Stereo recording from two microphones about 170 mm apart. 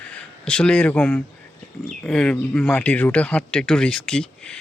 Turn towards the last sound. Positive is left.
turn(degrees=5)  # may be behind; listen again after turning